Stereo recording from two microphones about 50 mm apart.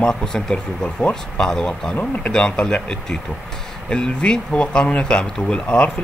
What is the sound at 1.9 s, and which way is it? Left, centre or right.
Speech, left.